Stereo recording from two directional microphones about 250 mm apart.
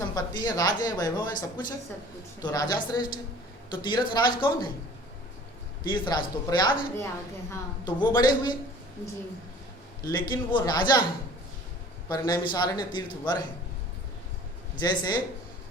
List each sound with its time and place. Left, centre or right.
0.1 s speech: centre
5.8 s speech: centre
10.0 s speech: centre
12.0 s speech: centre
14.8 s speech: centre